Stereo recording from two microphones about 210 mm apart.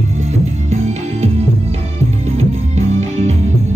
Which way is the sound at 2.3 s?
30° right (ahead or behind).